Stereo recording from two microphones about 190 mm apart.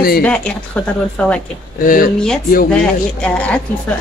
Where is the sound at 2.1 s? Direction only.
5° left (ahead or behind).